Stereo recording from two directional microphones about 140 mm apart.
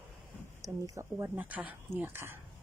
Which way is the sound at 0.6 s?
25° right (ahead or behind).